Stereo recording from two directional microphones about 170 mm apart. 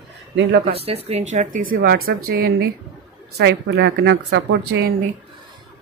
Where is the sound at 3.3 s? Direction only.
85° right.